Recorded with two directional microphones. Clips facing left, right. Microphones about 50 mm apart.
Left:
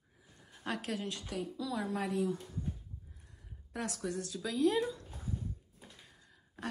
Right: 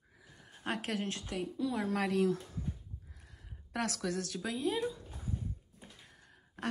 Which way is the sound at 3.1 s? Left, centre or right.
Right.